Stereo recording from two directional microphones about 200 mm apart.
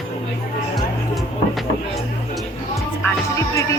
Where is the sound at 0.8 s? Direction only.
Centre (ahead or behind).